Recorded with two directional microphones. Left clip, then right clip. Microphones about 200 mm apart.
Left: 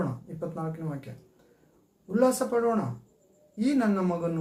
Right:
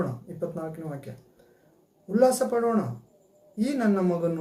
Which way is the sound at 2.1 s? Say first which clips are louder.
Right 3 dB; 5° right (ahead or behind).